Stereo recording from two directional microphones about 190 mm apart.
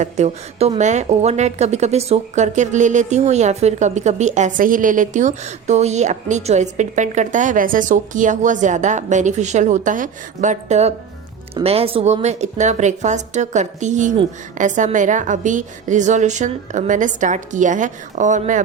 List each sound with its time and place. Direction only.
0.0 s a woman's voice: 35° right (ahead or behind)